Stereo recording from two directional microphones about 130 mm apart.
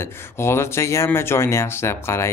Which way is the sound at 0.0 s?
20° left (ahead or behind).